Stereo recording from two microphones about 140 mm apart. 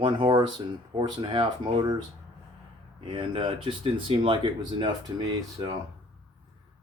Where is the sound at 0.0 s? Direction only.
35° right (ahead or behind).